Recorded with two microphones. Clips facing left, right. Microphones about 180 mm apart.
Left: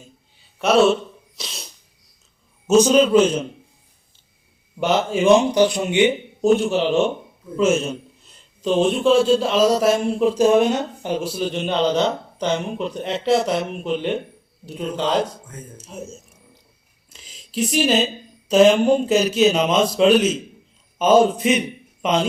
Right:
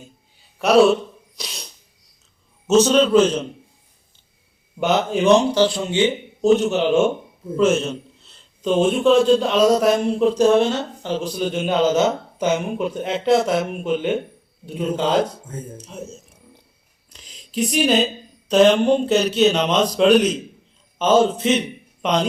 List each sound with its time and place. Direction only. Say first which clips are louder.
0.6 s a man's voice: right 2 dB; centre (ahead or behind)
1.4 s sneeze: right 1 dB; centre (ahead or behind)
2.6 s a man's voice: left 1 dB; 10° left (ahead or behind)
4.8 s a man's voice: even; centre (ahead or behind)
5.4 s a man's voice: left 1 dB; 15° left (ahead or behind)
6.7 s a man's voice: right 1 dB; centre (ahead or behind)
8.6 s a man's voice: right 1 dB; 5° right (ahead or behind)
15.8 s a man's voice: even; 5° left (ahead or behind)